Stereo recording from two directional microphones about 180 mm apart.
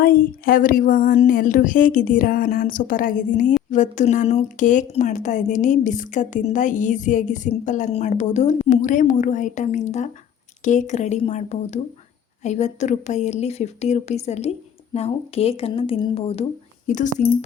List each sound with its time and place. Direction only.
0.0 s speech: 55° left (ahead or behind)